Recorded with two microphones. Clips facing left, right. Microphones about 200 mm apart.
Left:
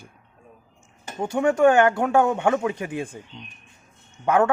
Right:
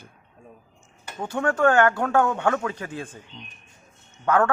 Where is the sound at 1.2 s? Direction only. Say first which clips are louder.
Left 4 dB; 15° left (ahead or behind).